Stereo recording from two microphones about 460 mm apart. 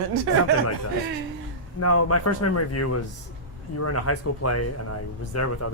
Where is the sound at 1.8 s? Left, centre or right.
Left.